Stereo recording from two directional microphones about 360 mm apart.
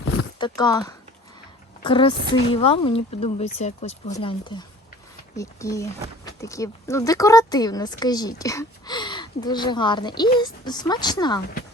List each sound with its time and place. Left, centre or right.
0.0 s clip-clop: left
0.3 s speech: centre